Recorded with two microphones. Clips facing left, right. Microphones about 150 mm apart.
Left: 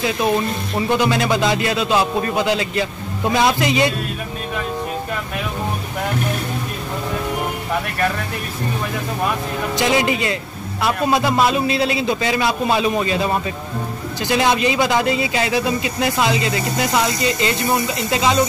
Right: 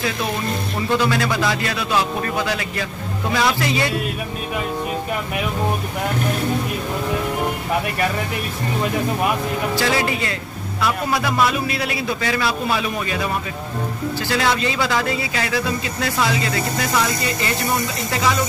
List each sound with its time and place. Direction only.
0.8 s a man's voice: 20° left (ahead or behind)
9.8 s a man's voice: 20° left (ahead or behind)